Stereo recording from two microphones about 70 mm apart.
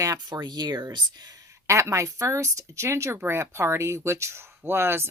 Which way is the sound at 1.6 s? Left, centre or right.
Right.